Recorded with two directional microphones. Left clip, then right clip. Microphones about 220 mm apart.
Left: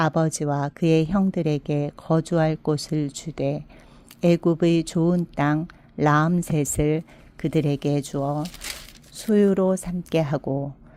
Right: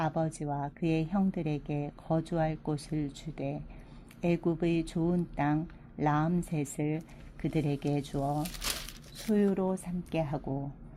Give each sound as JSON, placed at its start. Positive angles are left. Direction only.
{"t": 0.0, "sound": "a woman's voice", "side_deg": 35}
{"t": 9.3, "sound": "a woman's voice", "side_deg": 40}